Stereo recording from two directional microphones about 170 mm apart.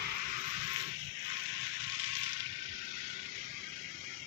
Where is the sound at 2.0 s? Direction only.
45° right (ahead or behind).